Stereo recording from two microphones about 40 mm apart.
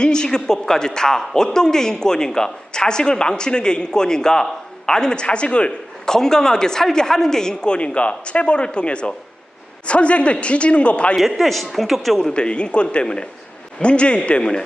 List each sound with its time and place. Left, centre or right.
0.0 s speech: centre
6.1 s a man's voice: centre; by 11.2 s left
11.2 s a man's voice: centre
12.3 s speech: left